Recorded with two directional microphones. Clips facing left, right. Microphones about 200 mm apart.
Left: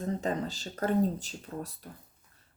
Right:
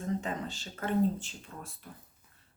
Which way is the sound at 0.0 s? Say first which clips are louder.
Left 3 dB; 35° left (ahead or behind).